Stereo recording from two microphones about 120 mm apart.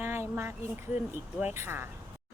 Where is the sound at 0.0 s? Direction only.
20° right (ahead or behind).